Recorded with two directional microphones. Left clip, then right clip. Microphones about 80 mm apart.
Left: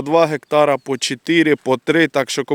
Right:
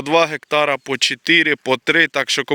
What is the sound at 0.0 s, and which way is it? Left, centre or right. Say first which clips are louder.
Speech: left 1 dB; left.